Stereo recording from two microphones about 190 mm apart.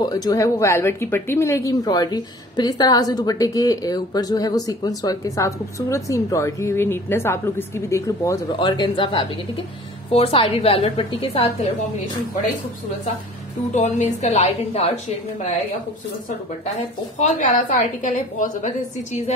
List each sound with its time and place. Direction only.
0.0 s speech: 20° left (ahead or behind)
13.7 s a woman's voice: 40° left (ahead or behind)
17.2 s a woman's voice: 40° left (ahead or behind)